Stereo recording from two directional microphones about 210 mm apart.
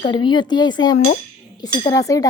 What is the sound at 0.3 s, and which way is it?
Speech, 20° left (ahead or behind).